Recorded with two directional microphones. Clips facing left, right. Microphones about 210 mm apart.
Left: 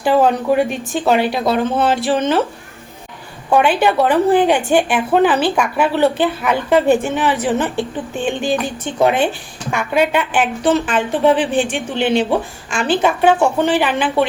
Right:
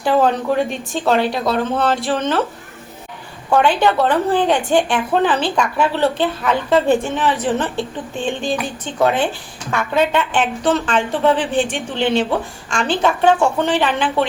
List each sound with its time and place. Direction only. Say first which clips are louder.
0.0 s a woman's voice: left 2 dB; 10° left (ahead or behind)
3.5 s a woman's voice: left 1 dB; 10° left (ahead or behind)